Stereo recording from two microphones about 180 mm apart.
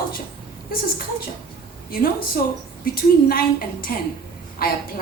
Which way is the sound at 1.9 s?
55° left (ahead or behind).